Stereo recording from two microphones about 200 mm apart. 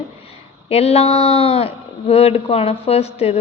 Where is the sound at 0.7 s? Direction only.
30° left (ahead or behind).